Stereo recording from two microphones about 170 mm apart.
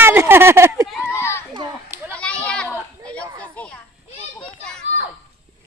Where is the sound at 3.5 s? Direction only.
5° left (ahead or behind).